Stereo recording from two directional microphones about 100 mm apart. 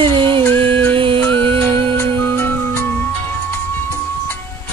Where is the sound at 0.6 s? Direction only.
60° right (ahead or behind).